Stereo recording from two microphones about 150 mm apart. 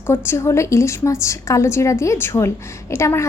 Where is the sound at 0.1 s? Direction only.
15° left (ahead or behind).